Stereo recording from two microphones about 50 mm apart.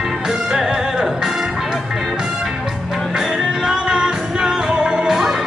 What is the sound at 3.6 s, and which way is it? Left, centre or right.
Music, centre.